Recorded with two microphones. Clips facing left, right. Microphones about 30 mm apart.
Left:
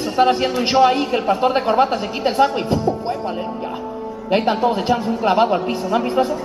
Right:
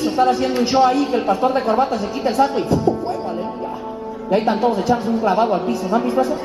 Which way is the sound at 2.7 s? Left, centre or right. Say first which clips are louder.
Right 1 dB; left.